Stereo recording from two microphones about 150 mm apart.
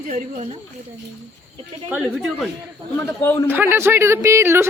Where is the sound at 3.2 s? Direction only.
20° left (ahead or behind).